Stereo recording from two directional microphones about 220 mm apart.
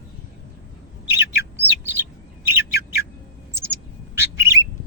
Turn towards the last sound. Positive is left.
turn(degrees=-10)  # may be behind; listen again after turning